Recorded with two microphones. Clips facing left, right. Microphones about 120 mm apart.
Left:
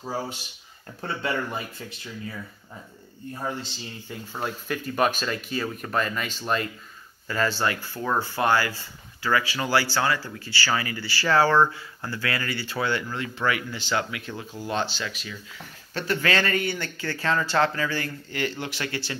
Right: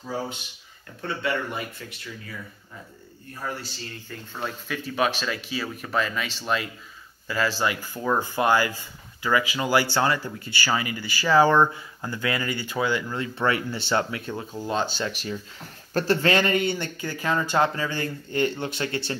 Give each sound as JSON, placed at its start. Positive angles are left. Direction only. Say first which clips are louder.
{"t": 1.0, "sound": "speech", "louder": "right 1 dB", "side_deg": 30}
{"t": 3.4, "sound": "speech", "louder": "even", "side_deg": 20}
{"t": 4.4, "sound": "speech", "louder": "left 2 dB", "side_deg": 0}
{"t": 13.2, "sound": "speech", "louder": "right 2 dB", "side_deg": -30}
{"t": 16.3, "sound": "speech", "louder": "right 3 dB", "side_deg": -20}